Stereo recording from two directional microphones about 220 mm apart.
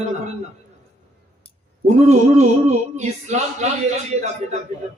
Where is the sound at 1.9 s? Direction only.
30° right (ahead or behind).